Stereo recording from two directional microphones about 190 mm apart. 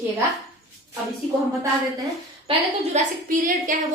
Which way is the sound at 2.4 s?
35° right (ahead or behind).